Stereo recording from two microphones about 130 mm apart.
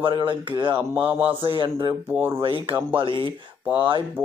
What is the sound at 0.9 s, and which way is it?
Speech, 15° right (ahead or behind).